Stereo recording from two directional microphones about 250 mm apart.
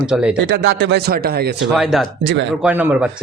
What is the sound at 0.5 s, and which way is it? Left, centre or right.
Speech, right.